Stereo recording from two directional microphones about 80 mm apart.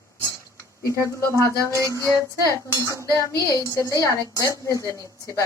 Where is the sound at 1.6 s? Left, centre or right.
Right.